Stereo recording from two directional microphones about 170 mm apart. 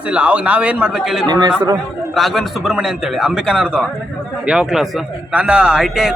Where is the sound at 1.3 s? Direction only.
25° right (ahead or behind).